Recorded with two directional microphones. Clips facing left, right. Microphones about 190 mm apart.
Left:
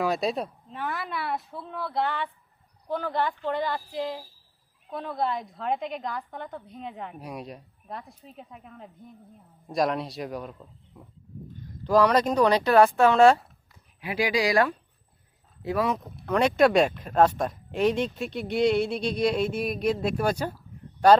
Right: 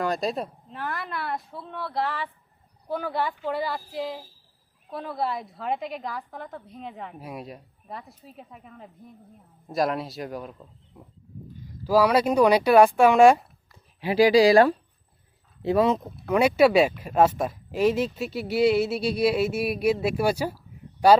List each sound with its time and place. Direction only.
0.0 s a woman's voice: centre (ahead or behind)
11.8 s speech: 5° right (ahead or behind)
14.0 s speech: 30° right (ahead or behind)
16.2 s speech: 10° right (ahead or behind)